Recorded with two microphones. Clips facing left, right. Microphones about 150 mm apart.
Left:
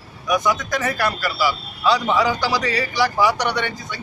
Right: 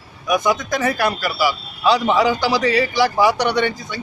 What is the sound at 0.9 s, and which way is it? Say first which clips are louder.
A man's voice: right 2 dB; 15° right (ahead or behind).